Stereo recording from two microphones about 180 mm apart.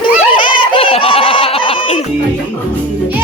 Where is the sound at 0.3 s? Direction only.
30° left (ahead or behind).